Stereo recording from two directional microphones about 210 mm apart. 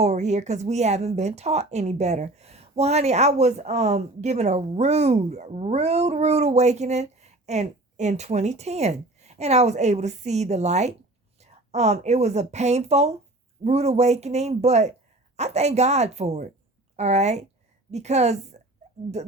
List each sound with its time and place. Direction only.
0.0 s a woman's voice: 35° right (ahead or behind)